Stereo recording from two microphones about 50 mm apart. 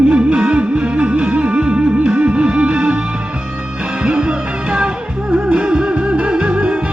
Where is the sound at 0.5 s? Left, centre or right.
Right.